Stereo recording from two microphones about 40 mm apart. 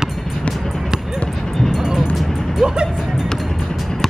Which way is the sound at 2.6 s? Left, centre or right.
Centre.